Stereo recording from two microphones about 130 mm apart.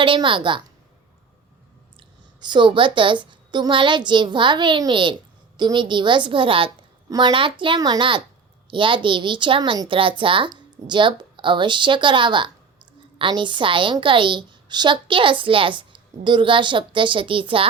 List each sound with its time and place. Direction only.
0.0 s a woman's voice: 40° right (ahead or behind)
2.0 s a woman's voice: 35° right (ahead or behind)